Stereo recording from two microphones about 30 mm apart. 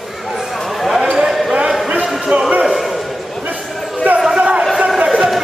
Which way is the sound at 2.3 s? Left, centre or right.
Right.